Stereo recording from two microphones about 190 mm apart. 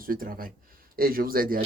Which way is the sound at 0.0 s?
45° right (ahead or behind).